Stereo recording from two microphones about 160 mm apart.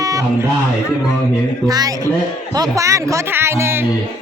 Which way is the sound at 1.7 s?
25° right (ahead or behind).